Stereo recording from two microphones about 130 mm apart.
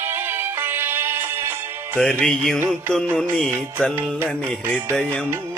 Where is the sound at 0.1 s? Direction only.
15° right (ahead or behind).